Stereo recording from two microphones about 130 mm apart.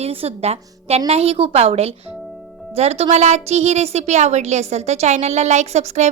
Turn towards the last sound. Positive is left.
turn(degrees=-60)  # may be behind; listen again after turning